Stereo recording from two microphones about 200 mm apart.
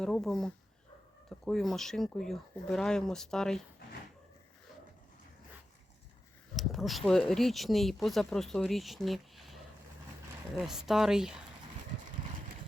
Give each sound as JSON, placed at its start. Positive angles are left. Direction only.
{"t": 0.0, "sound": "speech", "side_deg": 0}
{"t": 6.6, "sound": "speech", "side_deg": 0}
{"t": 10.6, "sound": "speech", "side_deg": 0}